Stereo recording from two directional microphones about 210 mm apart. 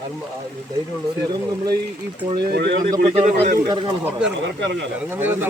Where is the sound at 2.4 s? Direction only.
50° right (ahead or behind).